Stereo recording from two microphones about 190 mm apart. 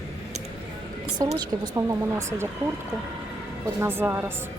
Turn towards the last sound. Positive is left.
turn(degrees=-10)  # may be behind; listen again after turning